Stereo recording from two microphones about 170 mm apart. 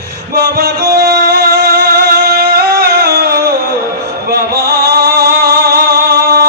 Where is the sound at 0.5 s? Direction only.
65° right (ahead or behind).